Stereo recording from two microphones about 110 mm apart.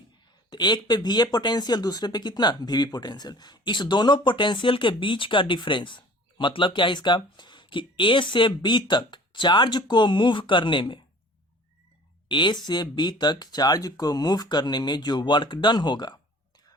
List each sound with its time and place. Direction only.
0.5 s speech: 40° left (ahead or behind)
12.3 s speech: 45° left (ahead or behind)